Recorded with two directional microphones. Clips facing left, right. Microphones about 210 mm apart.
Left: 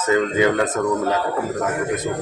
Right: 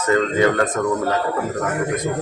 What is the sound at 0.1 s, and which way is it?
Speech, 10° left (ahead or behind).